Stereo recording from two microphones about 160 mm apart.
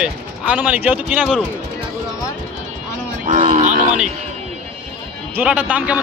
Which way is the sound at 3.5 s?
50° right (ahead or behind).